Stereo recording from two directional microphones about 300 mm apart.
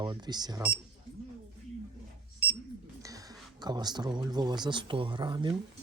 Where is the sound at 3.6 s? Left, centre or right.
Centre.